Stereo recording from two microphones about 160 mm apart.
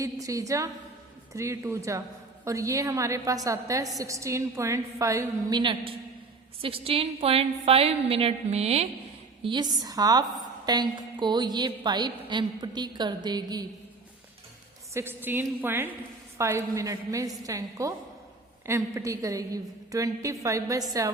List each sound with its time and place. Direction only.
0.0 s a woman's voice: 20° right (ahead or behind); by 8.9 s 40° right (ahead or behind)
9.4 s a woman's voice: 30° right (ahead or behind)
14.9 s a woman's voice: 15° right (ahead or behind)